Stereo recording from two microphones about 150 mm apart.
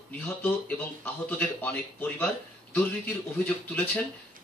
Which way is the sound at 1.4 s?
10° left (ahead or behind).